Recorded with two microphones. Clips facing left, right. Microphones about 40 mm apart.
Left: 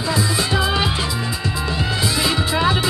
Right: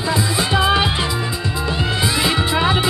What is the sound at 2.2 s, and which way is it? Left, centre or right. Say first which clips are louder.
Music: right 1 dB; centre.